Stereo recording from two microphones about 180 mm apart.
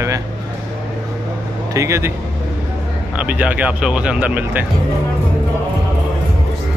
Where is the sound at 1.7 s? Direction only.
15° right (ahead or behind).